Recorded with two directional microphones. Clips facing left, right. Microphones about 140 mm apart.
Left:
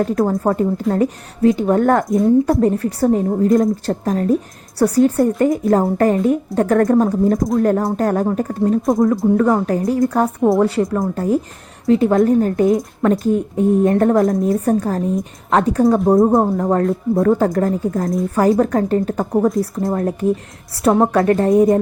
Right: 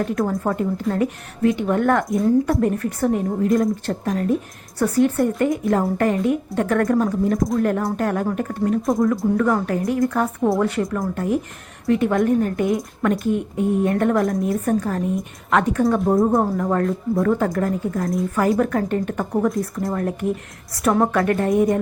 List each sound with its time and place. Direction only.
0.0 s a woman's voice: 35° left (ahead or behind)